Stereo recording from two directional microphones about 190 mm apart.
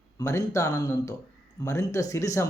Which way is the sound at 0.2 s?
15° left (ahead or behind).